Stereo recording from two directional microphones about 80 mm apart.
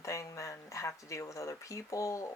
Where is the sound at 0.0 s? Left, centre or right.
Left.